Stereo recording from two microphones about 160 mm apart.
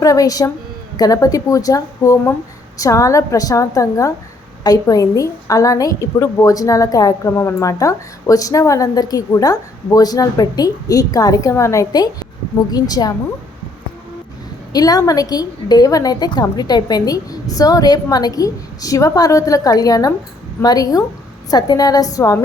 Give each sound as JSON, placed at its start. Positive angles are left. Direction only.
{"t": 0.0, "sound": "a woman's voice", "side_deg": 25}
{"t": 14.7, "sound": "a woman's voice", "side_deg": 25}